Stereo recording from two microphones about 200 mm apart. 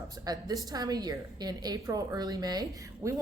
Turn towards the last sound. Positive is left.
turn(degrees=-15)  # may be behind; listen again after turning